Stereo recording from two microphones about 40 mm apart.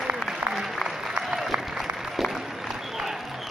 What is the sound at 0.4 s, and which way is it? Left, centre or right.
Applause, right.